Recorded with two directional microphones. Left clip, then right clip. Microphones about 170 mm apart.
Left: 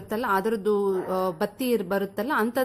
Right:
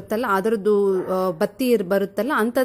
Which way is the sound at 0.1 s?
25° right (ahead or behind).